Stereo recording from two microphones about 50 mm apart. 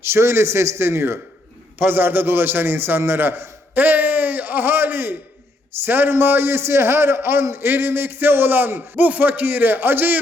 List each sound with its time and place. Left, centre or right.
0.0 s a man's voice: right
3.8 s a man's voice: right